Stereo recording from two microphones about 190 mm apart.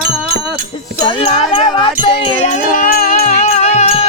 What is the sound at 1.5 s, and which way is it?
Music, 25° left (ahead or behind).